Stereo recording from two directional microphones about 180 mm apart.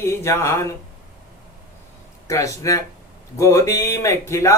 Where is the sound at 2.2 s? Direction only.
20° left (ahead or behind).